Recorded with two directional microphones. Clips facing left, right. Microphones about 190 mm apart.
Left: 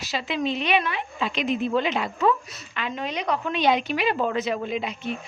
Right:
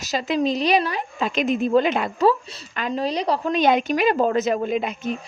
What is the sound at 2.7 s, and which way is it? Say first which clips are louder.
A woman's voice: right 6 dB; 40° right (ahead or behind).